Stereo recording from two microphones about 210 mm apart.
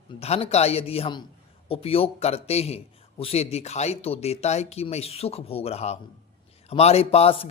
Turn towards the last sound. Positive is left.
turn(degrees=30)  # may be behind; listen again after turning